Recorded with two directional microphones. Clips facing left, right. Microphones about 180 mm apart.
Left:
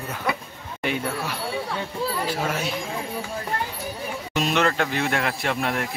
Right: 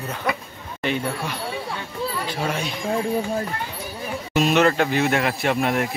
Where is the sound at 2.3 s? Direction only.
5° left (ahead or behind).